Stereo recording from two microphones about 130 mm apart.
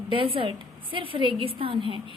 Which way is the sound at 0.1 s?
40° right (ahead or behind).